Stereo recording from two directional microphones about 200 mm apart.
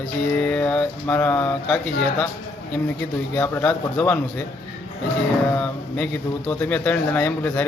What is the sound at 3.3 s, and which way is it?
Speech, 10° left (ahead or behind).